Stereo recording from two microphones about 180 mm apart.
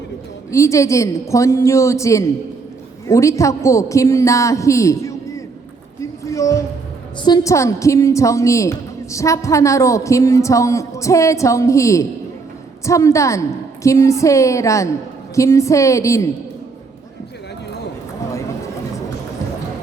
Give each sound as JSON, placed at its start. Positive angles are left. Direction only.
{"t": 0.5, "sound": "a woman's voice", "side_deg": 15}
{"t": 6.0, "sound": "a sound", "side_deg": 15}
{"t": 7.3, "sound": "a woman's voice", "side_deg": 20}